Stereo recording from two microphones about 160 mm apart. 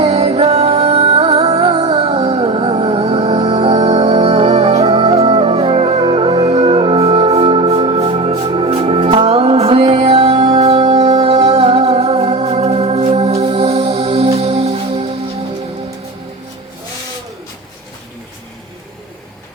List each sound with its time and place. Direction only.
0.0 s music: 40° right (ahead or behind)